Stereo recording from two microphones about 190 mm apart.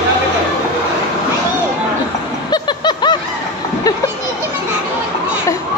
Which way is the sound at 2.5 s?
25° left (ahead or behind).